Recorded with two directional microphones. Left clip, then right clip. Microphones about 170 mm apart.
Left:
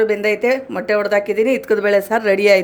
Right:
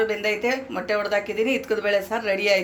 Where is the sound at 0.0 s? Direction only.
90° left.